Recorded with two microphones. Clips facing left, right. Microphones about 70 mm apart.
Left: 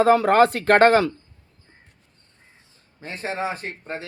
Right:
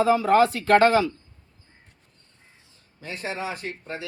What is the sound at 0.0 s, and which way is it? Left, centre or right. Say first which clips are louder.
A man's voice: left 3 dB; left.